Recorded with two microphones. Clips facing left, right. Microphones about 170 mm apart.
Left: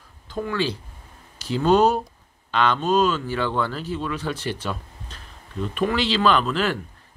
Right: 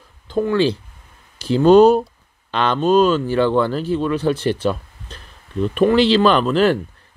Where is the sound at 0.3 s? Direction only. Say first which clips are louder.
Right 8 dB; 25° right (ahead or behind).